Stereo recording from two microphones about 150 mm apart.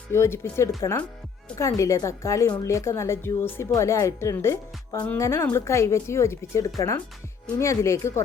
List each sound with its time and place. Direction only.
0.1 s a woman's voice: 15° left (ahead or behind)